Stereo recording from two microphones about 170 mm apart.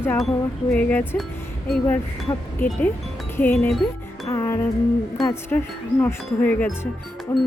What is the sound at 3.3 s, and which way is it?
Wind chime, 10° left (ahead or behind).